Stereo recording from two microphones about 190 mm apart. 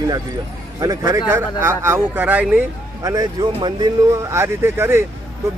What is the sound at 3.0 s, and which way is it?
Speech, 20° right (ahead or behind).